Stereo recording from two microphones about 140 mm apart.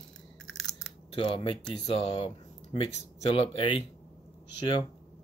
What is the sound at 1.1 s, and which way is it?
Speech, 40° left (ahead or behind).